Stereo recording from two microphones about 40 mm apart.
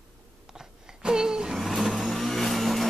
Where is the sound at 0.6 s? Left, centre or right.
Centre.